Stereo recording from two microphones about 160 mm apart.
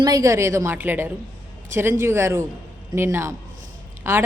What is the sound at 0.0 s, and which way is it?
A woman's voice, 20° right (ahead or behind).